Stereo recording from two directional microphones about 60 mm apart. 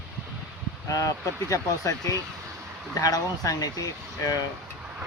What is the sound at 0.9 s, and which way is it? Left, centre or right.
Speech, left.